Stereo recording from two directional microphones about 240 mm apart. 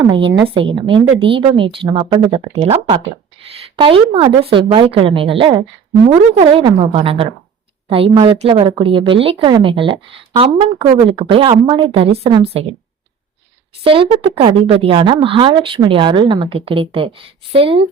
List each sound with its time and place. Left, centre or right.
0.0 s a woman's voice: right
13.8 s a woman's voice: right